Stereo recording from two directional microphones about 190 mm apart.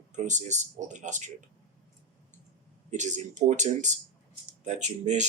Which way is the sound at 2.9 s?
40° right (ahead or behind).